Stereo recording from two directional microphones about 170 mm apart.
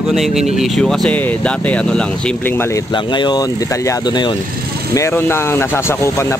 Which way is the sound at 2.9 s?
25° left (ahead or behind).